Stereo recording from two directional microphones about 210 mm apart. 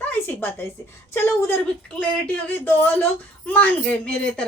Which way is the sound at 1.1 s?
10° left (ahead or behind).